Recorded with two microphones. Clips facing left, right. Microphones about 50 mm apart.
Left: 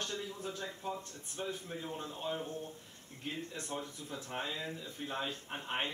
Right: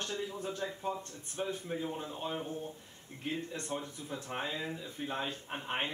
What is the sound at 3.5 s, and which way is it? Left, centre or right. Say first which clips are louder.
Speech: right 2 dB; centre.